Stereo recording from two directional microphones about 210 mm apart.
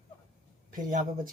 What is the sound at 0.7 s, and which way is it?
Speech, 40° right (ahead or behind).